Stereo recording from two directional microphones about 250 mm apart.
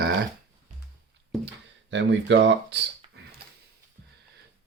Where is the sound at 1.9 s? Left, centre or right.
Right.